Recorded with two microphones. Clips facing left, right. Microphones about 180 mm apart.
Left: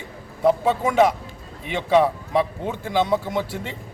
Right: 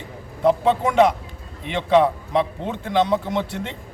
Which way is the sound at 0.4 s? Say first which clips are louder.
Right 1 dB; 5° left (ahead or behind).